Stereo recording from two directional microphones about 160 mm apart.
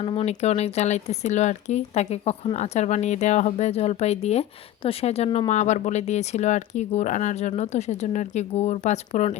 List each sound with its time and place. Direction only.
0.0 s speech: 35° left (ahead or behind)